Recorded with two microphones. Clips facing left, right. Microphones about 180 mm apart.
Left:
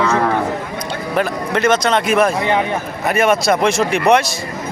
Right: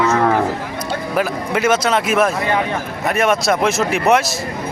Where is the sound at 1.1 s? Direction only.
5° right (ahead or behind).